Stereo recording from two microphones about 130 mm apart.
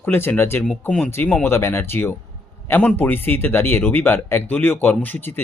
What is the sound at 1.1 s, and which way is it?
Speech, 20° left (ahead or behind).